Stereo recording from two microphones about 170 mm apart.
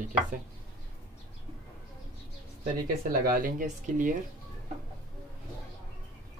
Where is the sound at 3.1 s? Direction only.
55° right (ahead or behind).